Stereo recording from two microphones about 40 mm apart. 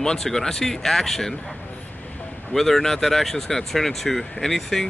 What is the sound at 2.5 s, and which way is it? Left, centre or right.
Speech, centre.